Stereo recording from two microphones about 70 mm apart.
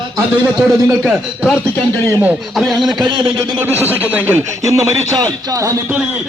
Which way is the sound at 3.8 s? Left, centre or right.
Right.